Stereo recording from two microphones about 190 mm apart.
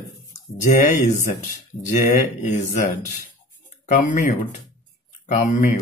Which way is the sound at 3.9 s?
45° left (ahead or behind).